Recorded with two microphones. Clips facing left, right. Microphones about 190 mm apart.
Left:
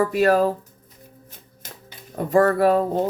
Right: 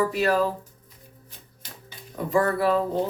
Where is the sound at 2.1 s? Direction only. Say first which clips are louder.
Left 5 dB; 50° left (ahead or behind).